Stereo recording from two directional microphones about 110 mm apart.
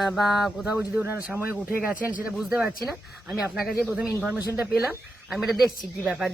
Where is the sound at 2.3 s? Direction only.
Centre (ahead or behind).